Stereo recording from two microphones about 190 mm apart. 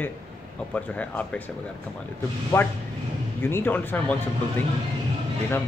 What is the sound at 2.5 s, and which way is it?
Speech, 10° left (ahead or behind).